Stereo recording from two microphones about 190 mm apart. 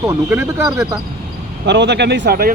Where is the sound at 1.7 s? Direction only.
65° right (ahead or behind).